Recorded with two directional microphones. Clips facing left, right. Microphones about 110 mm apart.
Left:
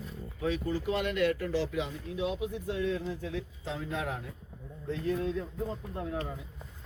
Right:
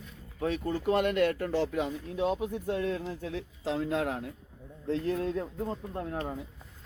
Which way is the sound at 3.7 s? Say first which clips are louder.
Right 7 dB; 70° right (ahead or behind).